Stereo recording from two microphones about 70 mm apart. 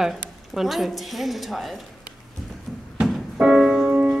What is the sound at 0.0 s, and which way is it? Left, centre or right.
A woman's voice, centre.